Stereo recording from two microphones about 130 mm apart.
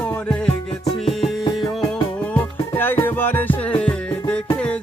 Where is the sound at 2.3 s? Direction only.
15° left (ahead or behind).